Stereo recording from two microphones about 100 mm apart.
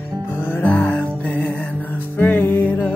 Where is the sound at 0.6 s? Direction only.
15° left (ahead or behind).